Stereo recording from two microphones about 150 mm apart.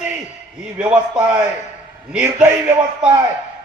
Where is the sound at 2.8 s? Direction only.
30° right (ahead or behind).